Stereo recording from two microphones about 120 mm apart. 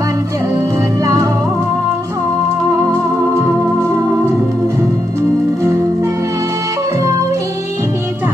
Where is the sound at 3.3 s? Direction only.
25° right (ahead or behind).